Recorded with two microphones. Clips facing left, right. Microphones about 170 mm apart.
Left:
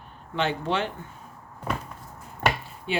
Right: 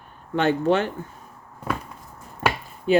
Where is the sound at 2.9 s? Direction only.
40° right (ahead or behind).